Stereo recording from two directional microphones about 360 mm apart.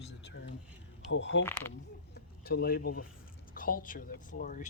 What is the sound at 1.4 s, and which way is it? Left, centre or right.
Speech, centre.